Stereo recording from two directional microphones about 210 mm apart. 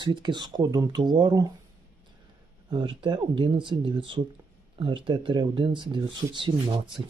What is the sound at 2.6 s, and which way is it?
Speech, 25° right (ahead or behind).